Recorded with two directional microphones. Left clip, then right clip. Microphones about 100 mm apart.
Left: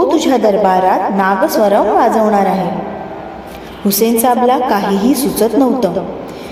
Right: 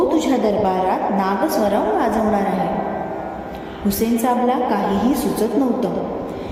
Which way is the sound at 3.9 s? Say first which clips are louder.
Left 7 dB; 65° left (ahead or behind).